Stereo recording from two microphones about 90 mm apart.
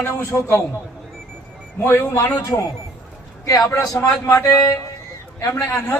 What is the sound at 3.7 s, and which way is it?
A man's voice, 30° left (ahead or behind).